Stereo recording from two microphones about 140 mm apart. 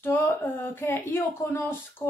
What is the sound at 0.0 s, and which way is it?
A woman's voice, 15° left (ahead or behind).